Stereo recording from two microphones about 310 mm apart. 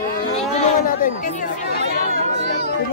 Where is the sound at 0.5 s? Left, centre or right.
Left.